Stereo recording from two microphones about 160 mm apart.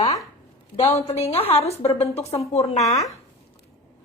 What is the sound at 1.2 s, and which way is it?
A woman's voice, 40° left (ahead or behind).